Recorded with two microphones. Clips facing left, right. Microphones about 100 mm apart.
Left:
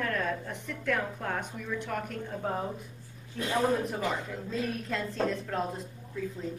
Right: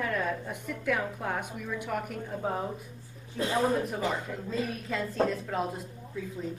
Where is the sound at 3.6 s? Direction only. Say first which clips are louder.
Even; centre (ahead or behind).